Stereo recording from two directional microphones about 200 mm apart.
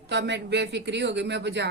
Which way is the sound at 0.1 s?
60° right (ahead or behind).